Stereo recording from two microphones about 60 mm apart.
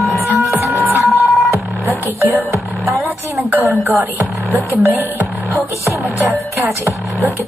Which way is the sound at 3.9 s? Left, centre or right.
Right.